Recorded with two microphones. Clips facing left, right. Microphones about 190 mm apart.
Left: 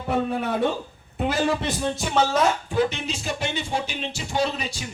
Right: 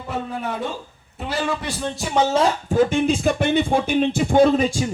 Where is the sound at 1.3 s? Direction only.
45° left (ahead or behind).